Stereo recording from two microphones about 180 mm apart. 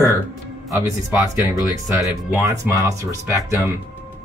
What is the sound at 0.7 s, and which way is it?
Speech, 15° right (ahead or behind).